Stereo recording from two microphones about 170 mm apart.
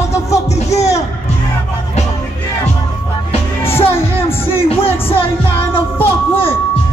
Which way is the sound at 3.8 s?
35° left (ahead or behind).